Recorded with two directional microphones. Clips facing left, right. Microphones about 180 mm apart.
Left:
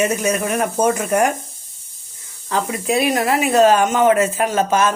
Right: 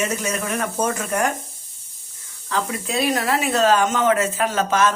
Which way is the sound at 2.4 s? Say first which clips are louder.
Left 5 dB; 15° left (ahead or behind).